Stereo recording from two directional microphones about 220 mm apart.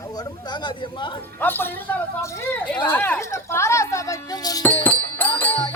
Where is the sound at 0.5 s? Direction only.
20° left (ahead or behind).